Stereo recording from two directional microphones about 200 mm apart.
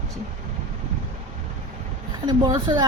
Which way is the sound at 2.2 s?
20° right (ahead or behind).